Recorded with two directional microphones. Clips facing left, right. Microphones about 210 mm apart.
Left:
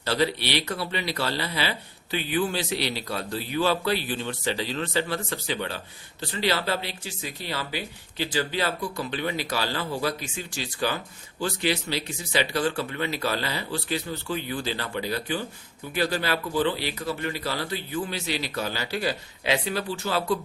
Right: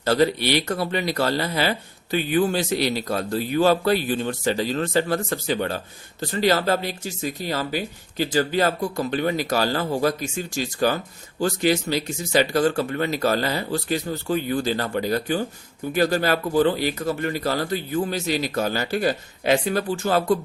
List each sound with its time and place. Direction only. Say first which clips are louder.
0.0 s speech: right 6 dB; 45° right (ahead or behind)